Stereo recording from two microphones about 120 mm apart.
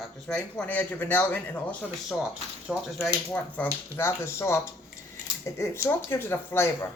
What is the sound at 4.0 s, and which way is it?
Speech, 25° left (ahead or behind).